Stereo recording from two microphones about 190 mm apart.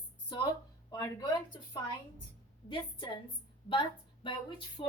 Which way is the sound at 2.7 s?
25° left (ahead or behind).